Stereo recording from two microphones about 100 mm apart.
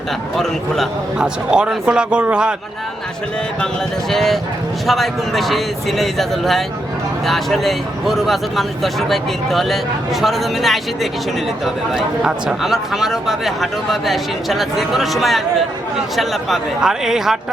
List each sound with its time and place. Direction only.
1.2 s speech: 10° right (ahead or behind)
4.1 s speech: centre (ahead or behind)